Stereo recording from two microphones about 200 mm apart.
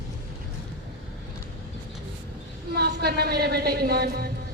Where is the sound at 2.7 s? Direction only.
55° right (ahead or behind).